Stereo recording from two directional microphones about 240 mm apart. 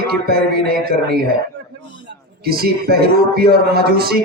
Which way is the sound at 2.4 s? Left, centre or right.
Right.